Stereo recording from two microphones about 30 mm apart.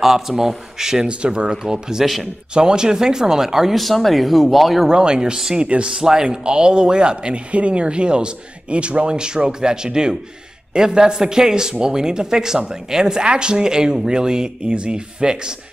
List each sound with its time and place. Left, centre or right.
0.0 s a man's voice: centre
1.0 s speech: right
1.6 s speech: centre
3.7 s speech: centre
4.8 s speech: right
9.1 s speech: right